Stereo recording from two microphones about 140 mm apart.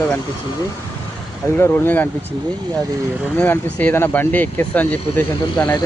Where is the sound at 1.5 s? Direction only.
15° left (ahead or behind).